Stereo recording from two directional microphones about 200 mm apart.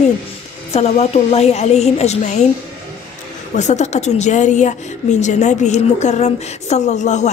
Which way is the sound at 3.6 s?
35° left (ahead or behind).